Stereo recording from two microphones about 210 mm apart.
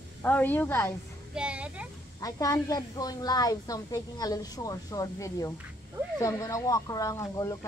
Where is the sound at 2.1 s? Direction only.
15° left (ahead or behind).